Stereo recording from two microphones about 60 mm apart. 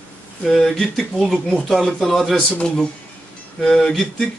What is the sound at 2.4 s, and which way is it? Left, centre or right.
Speech, centre.